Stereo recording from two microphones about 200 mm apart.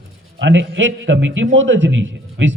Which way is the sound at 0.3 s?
65° right (ahead or behind).